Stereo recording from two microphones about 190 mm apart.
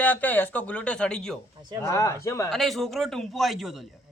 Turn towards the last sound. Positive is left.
turn(degrees=0)  # may be behind; listen again after turning